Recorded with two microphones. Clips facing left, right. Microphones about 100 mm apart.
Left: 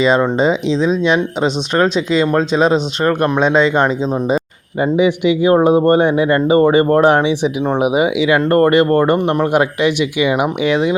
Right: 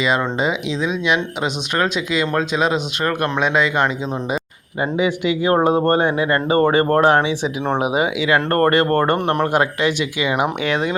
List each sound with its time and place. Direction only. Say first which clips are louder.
0.3 s speech: left 6 dB; 30° left (ahead or behind)